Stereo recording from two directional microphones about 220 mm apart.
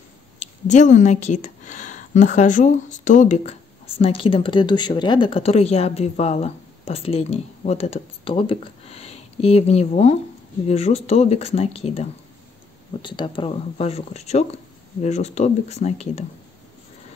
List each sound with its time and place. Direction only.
0.4 s a woman's voice: 30° left (ahead or behind)